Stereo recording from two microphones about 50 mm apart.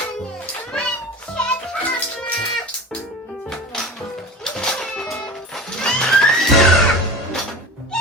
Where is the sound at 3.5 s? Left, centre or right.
Centre.